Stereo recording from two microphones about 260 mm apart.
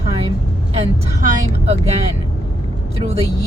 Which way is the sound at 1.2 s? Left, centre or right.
Right.